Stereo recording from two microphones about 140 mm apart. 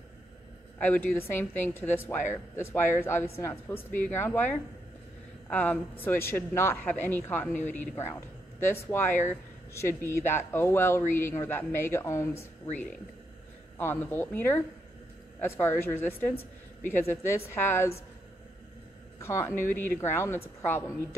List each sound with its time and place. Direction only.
0.7 s speech: 10° left (ahead or behind)
13.7 s speech: 15° left (ahead or behind)
19.1 s a woman's voice: 20° left (ahead or behind)